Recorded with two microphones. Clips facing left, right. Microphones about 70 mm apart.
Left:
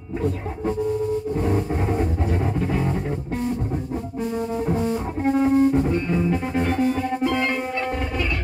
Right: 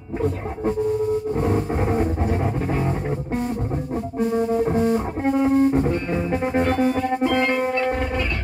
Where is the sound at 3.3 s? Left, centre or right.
Right.